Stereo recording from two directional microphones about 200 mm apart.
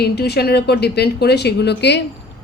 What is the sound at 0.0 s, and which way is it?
Speech, 55° left (ahead or behind).